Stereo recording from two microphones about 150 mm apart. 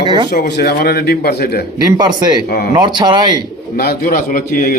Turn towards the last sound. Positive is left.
turn(degrees=70)  # may be behind; listen again after turning